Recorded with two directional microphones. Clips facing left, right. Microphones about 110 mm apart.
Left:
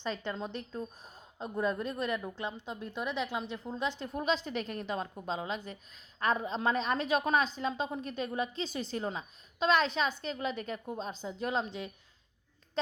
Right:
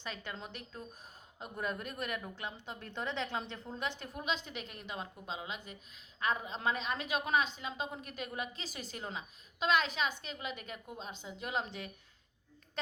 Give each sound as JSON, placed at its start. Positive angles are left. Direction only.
{"t": 0.4, "sound": "a woman's voice", "side_deg": 30}
{"t": 2.9, "sound": "speech", "side_deg": 15}
{"t": 4.0, "sound": "a woman's voice", "side_deg": 35}